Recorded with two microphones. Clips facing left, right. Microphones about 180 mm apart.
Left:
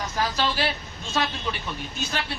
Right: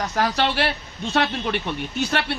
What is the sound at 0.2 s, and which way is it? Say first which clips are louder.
Speech: right 4 dB; 65° right (ahead or behind).